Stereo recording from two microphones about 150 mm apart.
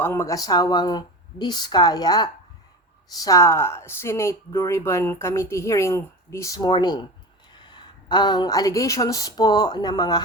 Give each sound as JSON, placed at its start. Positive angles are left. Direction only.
{"t": 0.0, "sound": "speech", "side_deg": 20}